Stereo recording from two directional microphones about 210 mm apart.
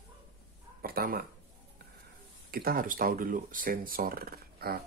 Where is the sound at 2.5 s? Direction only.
45° right (ahead or behind).